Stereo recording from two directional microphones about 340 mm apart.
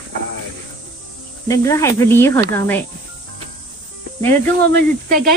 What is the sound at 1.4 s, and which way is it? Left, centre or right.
A woman's voice, centre.